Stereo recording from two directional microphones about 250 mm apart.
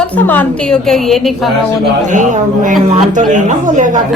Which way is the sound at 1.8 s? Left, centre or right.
Right.